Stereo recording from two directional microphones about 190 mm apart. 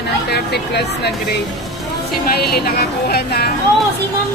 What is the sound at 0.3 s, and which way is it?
Speech, 60° left (ahead or behind).